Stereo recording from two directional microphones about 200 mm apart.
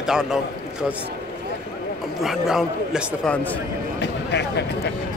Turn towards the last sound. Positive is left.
turn(degrees=55)  # may be behind; listen again after turning